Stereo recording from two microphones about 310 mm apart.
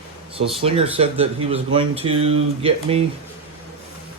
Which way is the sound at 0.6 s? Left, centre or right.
Centre.